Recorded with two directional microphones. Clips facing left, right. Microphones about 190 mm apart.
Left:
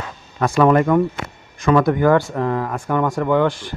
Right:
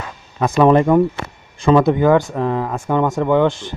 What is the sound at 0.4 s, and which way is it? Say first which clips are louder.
Speech: right 2 dB; 20° right (ahead or behind).